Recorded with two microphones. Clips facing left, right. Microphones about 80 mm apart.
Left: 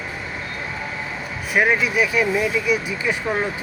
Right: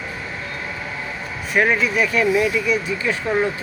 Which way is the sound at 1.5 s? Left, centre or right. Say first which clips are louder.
Right 1 dB; centre.